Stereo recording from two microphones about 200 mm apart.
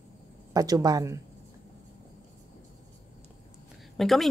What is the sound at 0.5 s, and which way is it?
Speech, 20° right (ahead or behind).